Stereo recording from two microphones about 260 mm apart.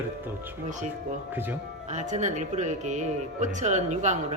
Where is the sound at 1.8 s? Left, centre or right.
Right.